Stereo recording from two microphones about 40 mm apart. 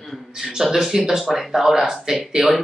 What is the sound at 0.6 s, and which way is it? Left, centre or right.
Speech, centre.